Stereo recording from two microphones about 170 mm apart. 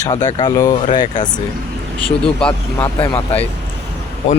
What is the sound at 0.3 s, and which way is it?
Speech, 20° left (ahead or behind).